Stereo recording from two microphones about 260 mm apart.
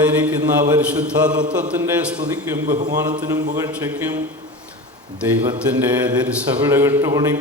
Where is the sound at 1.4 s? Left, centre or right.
Centre.